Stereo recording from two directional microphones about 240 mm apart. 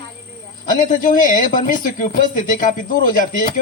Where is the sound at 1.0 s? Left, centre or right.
Left.